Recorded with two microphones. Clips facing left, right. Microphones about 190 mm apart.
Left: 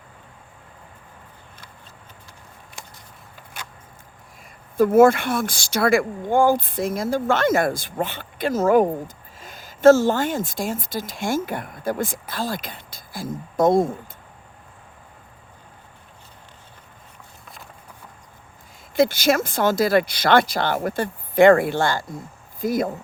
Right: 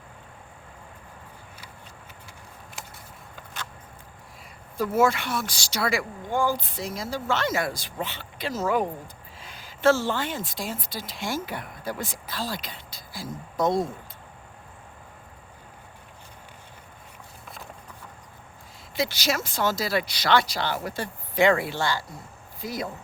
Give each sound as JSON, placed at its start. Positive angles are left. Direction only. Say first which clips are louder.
{"t": 4.8, "sound": "speech", "louder": "left 9 dB", "side_deg": 50}
{"t": 18.9, "sound": "speech", "louder": "left 9 dB", "side_deg": 50}